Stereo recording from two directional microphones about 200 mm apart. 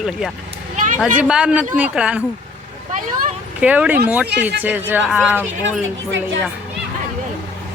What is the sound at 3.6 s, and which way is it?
Speech, 5° right (ahead or behind).